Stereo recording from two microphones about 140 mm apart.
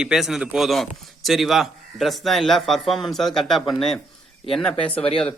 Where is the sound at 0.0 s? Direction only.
5° right (ahead or behind).